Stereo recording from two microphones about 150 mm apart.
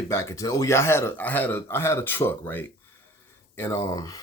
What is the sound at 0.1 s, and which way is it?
Speech, 20° left (ahead or behind).